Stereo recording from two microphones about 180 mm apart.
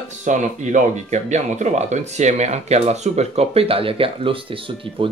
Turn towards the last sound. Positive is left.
turn(degrees=-30)  # may be behind; listen again after turning